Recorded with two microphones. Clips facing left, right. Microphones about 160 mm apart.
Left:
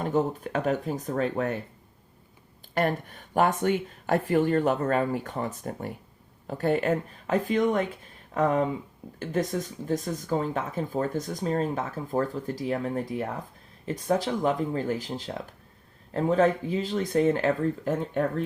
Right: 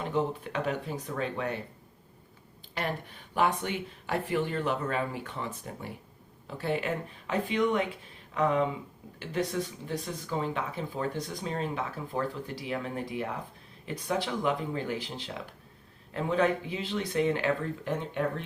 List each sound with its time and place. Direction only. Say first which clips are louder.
0.0 s speech: left 4 dB; 45° left (ahead or behind)
2.7 s speech: left 8 dB; 45° left (ahead or behind)